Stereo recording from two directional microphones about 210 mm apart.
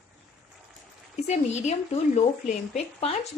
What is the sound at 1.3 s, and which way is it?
A woman's voice, 35° left (ahead or behind).